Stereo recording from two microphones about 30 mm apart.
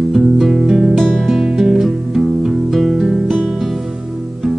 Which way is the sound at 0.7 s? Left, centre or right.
Right.